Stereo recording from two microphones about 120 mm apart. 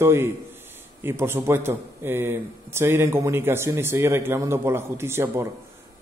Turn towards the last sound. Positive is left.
turn(degrees=-20)  # may be behind; listen again after turning